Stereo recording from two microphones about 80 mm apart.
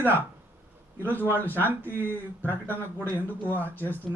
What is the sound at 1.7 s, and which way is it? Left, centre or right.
Speech, right.